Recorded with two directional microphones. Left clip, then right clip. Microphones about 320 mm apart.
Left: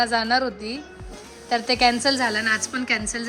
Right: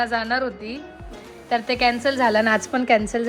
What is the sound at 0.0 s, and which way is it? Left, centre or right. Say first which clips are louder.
A woman's voice: left 1 dB; centre.